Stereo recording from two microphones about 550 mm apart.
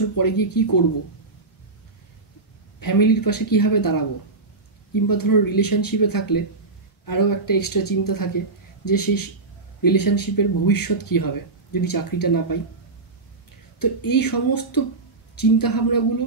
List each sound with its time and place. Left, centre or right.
0.1 s speech: left
2.8 s speech: left
13.7 s speech: left